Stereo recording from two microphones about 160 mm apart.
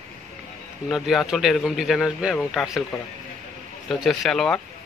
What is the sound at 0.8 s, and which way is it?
A man's voice, centre (ahead or behind).